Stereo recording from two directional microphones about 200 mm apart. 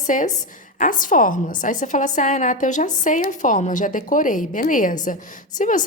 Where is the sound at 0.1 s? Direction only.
40° left (ahead or behind).